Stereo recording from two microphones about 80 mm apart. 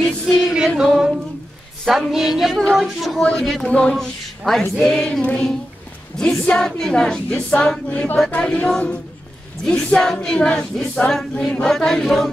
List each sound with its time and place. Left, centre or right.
0.0 s music: centre
1.9 s speech: centre
4.7 s female singing: centre
11.6 s speech: centre